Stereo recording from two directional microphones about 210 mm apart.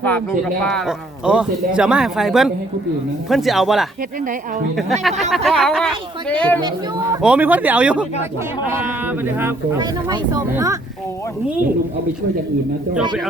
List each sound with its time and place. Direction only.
0.0 s speech: 5° left (ahead or behind)
6.6 s speech: 20° right (ahead or behind)
7.2 s speech: 5° right (ahead or behind)